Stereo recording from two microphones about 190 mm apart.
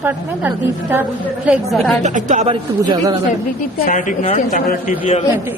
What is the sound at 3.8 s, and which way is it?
A woman's voice, 40° left (ahead or behind).